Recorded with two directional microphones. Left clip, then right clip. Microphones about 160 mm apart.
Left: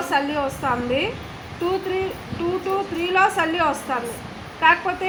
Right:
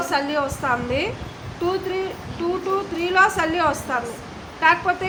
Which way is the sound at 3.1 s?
35° left (ahead or behind).